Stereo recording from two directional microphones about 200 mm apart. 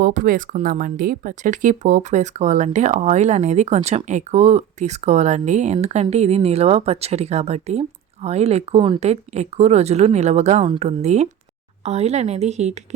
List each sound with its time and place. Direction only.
0.0 s speech: 45° right (ahead or behind)